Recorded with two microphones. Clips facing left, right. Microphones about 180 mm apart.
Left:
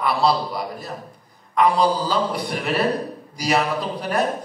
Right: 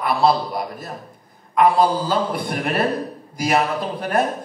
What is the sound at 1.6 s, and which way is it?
A man's voice, 50° right (ahead or behind).